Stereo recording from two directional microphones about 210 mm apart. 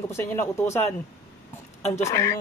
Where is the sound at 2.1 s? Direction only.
15° left (ahead or behind).